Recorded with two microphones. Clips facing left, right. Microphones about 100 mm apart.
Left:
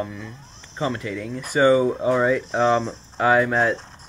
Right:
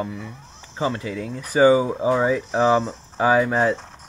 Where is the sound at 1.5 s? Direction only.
30° right (ahead or behind).